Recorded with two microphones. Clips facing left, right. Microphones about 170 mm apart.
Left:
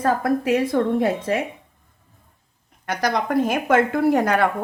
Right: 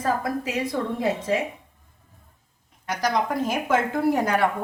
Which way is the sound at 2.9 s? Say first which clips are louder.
Left 2 dB; 60° left (ahead or behind).